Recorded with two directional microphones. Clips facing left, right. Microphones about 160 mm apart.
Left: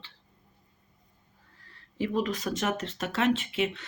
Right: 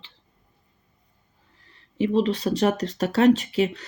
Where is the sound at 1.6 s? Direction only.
20° right (ahead or behind).